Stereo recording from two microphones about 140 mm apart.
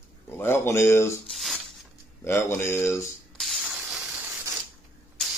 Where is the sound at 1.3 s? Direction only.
Centre (ahead or behind).